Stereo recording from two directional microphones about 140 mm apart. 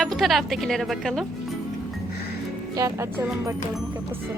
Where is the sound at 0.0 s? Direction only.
Centre (ahead or behind).